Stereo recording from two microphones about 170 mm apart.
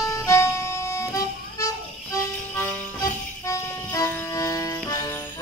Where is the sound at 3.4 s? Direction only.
20° left (ahead or behind).